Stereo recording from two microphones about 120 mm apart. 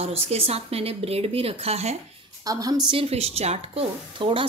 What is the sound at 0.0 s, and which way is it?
A woman's voice, 55° right (ahead or behind).